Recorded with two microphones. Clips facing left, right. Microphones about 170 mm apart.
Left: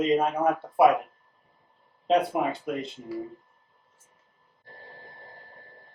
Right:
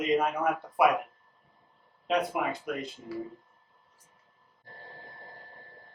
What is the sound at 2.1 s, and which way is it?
Speech, 30° left (ahead or behind).